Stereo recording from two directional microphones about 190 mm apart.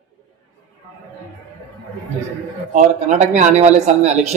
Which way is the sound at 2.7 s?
40° right (ahead or behind).